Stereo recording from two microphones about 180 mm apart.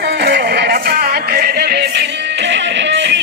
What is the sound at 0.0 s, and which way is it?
Music, 70° right (ahead or behind).